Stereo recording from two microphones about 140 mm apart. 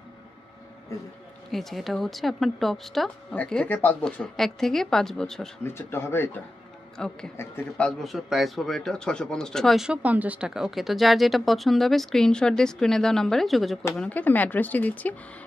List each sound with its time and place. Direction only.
1.5 s speech: centre (ahead or behind)
5.8 s speech: 20° left (ahead or behind)
7.0 s speech: 5° left (ahead or behind)
13.9 s speech: 10° left (ahead or behind)